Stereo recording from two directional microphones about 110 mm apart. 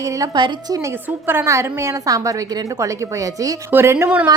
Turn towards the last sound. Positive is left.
turn(degrees=-20)  # may be behind; listen again after turning